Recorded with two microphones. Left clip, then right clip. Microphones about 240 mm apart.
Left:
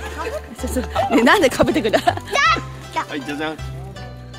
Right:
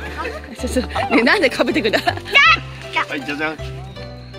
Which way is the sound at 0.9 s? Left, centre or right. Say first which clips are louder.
Left 1 dB; centre.